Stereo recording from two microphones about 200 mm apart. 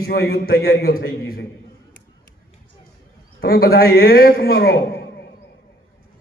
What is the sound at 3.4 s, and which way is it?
A man's voice, 50° left (ahead or behind).